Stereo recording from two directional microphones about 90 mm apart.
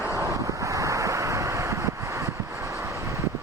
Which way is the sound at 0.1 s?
40° right (ahead or behind).